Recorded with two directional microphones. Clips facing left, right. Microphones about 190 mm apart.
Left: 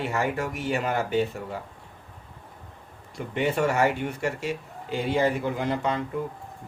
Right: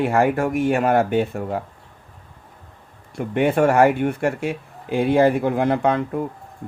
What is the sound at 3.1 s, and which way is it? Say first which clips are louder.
Speech: right 7 dB; 55° right (ahead or behind).